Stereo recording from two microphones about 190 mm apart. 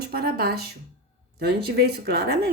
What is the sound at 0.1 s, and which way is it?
Speech, 55° right (ahead or behind).